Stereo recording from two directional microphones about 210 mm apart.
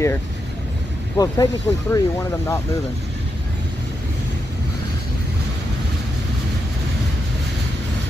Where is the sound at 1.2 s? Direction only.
20° left (ahead or behind).